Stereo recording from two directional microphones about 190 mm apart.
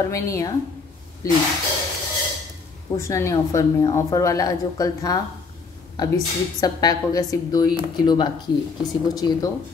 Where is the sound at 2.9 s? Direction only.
15° left (ahead or behind).